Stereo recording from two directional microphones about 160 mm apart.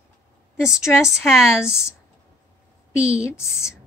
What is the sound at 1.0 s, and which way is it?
Speech, 5° right (ahead or behind).